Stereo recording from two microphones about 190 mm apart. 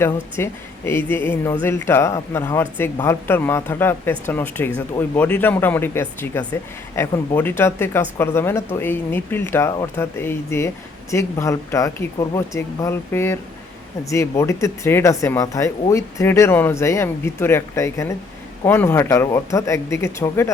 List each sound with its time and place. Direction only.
0.0 s speech: 15° left (ahead or behind)